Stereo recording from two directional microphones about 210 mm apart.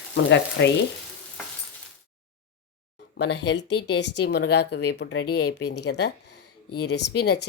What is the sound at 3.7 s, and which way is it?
Speech, 90° left.